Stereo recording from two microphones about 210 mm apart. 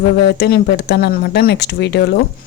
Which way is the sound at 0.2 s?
50° left (ahead or behind).